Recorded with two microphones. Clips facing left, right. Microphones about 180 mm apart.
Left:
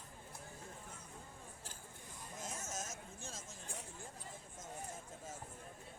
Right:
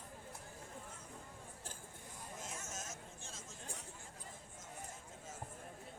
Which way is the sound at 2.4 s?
40° left (ahead or behind).